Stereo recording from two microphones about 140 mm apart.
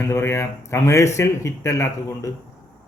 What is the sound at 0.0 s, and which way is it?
Speech, 20° left (ahead or behind).